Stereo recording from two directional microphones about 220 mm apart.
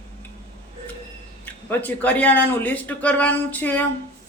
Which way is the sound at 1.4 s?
10° left (ahead or behind).